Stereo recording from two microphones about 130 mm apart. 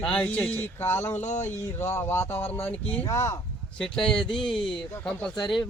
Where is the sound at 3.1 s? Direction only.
25° left (ahead or behind).